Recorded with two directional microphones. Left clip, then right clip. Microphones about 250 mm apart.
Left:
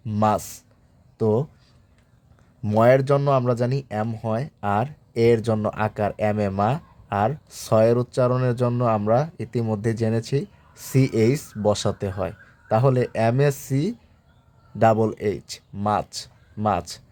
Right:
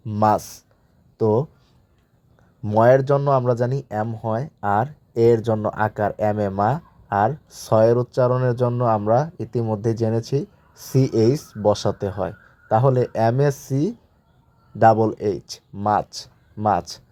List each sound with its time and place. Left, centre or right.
0.0 s speech: centre
2.6 s speech: centre